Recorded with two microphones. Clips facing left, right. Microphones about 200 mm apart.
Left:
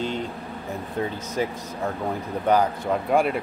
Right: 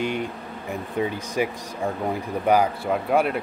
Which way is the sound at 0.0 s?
10° right (ahead or behind).